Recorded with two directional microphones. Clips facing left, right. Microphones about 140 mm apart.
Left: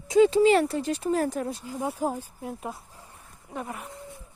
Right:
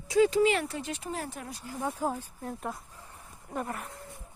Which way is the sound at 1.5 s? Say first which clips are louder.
Left 4 dB; 20° left (ahead or behind).